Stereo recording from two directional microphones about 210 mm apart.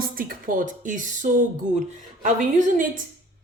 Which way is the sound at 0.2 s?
40° right (ahead or behind).